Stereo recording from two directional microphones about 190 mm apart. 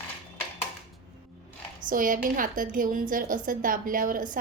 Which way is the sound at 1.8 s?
45° right (ahead or behind).